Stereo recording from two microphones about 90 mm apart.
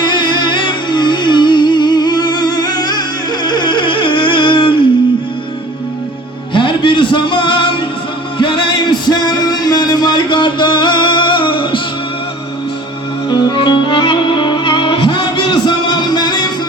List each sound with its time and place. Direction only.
0.0 s music: 55° left (ahead or behind)
3.4 s a sound: 55° left (ahead or behind)
6.5 s music: 65° left (ahead or behind)
13.3 s music: 60° left (ahead or behind)